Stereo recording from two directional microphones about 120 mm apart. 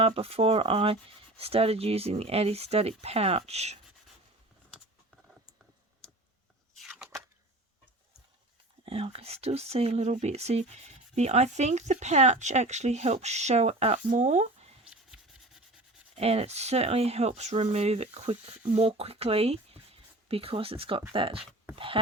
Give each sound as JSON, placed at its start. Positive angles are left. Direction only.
{"t": 0.0, "sound": "speech", "side_deg": -55}
{"t": 6.7, "sound": "a sound", "side_deg": 0}
{"t": 8.8, "sound": "speech", "side_deg": -55}
{"t": 14.8, "sound": "rub", "side_deg": -5}
{"t": 16.1, "sound": "speech", "side_deg": -60}